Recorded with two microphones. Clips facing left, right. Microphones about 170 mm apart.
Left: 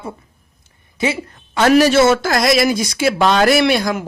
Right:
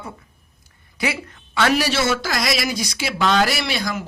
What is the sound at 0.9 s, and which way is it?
Speech, 25° left (ahead or behind).